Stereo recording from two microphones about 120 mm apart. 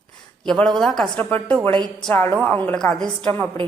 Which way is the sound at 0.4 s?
5° left (ahead or behind).